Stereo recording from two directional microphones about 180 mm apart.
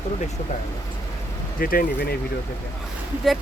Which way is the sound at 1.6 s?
55° left (ahead or behind).